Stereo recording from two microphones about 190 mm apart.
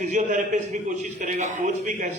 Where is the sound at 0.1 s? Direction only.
40° right (ahead or behind).